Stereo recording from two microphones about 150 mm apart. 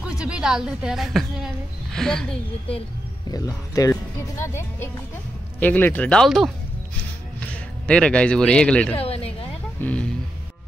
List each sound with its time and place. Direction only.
0.0 s a woman's voice: 5° right (ahead or behind)
3.3 s a man's voice: 25° left (ahead or behind); by 8.9 s 5° left (ahead or behind)
8.9 s speech: 40° left (ahead or behind)
9.8 s music: 10° left (ahead or behind)